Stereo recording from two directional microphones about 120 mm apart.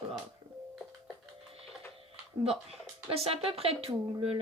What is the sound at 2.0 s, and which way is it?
Speech, 55° right (ahead or behind).